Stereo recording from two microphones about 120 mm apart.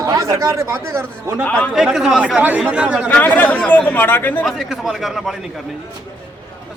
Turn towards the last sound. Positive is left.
turn(degrees=0)  # may be behind; listen again after turning